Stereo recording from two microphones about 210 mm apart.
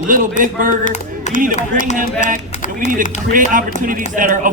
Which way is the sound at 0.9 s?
35° left (ahead or behind).